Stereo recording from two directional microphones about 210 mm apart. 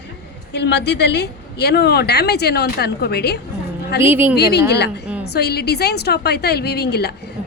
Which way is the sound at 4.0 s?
10° right (ahead or behind).